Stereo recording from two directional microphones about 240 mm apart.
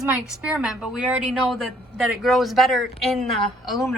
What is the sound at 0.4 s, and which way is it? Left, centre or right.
Speech, centre.